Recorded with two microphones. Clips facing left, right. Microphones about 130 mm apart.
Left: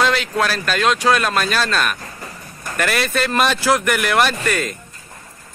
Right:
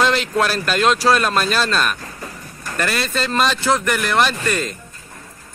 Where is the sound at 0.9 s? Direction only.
35° right (ahead or behind).